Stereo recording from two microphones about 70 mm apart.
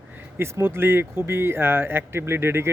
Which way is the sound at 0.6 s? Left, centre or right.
Right.